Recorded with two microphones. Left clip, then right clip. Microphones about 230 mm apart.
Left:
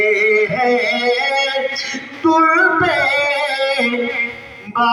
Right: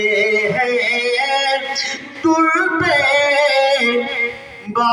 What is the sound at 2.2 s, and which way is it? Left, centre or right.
Music, right.